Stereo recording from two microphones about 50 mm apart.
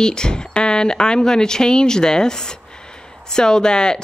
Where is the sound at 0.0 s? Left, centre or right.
Centre.